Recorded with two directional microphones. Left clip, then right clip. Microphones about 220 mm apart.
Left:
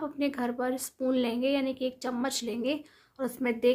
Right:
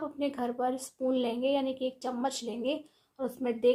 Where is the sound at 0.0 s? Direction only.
20° left (ahead or behind).